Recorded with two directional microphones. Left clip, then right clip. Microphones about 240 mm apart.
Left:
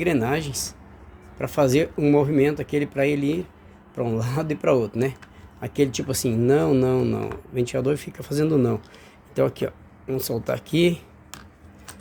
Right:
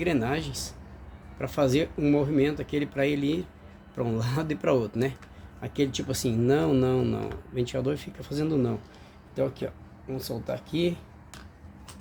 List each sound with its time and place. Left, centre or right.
0.0 s speech: left